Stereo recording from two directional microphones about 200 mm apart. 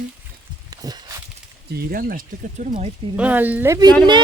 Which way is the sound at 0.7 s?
20° right (ahead or behind).